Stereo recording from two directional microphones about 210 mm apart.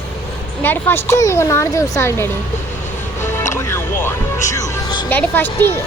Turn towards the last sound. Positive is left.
turn(degrees=10)  # may be behind; listen again after turning